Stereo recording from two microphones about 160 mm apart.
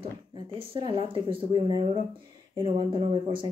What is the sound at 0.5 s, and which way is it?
Speech, 35° right (ahead or behind).